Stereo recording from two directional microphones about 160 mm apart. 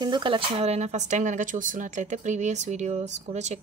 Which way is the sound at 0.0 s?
30° right (ahead or behind).